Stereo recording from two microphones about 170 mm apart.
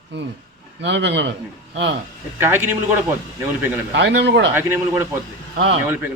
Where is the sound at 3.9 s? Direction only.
90° right.